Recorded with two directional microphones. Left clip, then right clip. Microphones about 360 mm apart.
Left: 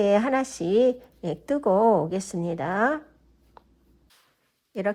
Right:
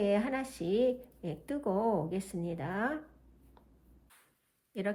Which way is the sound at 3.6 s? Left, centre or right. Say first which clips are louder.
Left 13 dB; centre.